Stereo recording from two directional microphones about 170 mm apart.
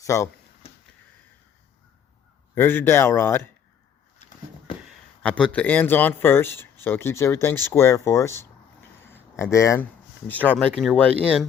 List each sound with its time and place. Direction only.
0.0 s speech: 15° left (ahead or behind)
2.6 s speech: 10° left (ahead or behind)
4.9 s speech: 5° left (ahead or behind)